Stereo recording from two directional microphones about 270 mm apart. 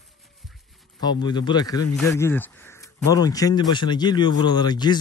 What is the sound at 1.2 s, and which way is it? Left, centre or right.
Speech, centre.